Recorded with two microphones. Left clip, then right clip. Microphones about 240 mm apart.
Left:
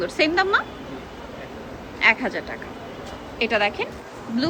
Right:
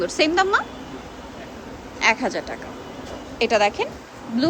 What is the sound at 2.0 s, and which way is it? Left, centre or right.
A woman's voice, centre.